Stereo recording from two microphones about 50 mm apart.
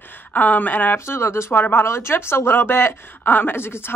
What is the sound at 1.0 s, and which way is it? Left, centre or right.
Speech, left.